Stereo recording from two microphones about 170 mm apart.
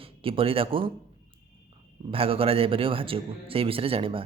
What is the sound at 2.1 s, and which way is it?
Speech, 35° right (ahead or behind).